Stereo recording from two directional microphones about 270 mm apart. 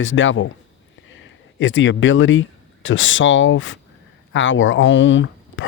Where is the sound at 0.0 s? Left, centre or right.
Left.